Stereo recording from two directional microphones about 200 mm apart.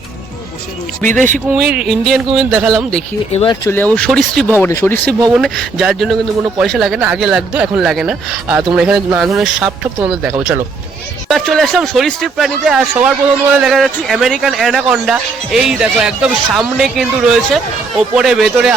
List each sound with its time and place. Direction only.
1.5 s a man's voice: 5° right (ahead or behind)
3.3 s speech: 25° left (ahead or behind)
3.8 s a man's voice: 5° left (ahead or behind)